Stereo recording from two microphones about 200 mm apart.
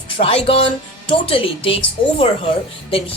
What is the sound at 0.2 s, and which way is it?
Speech, 30° left (ahead or behind).